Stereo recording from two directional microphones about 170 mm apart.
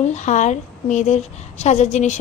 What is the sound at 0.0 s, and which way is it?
A woman's voice, 45° left (ahead or behind).